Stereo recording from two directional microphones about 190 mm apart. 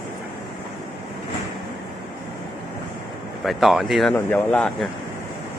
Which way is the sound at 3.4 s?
Centre (ahead or behind).